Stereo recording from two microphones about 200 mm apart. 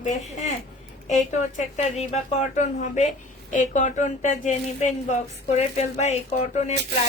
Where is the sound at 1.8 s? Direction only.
35° left (ahead or behind).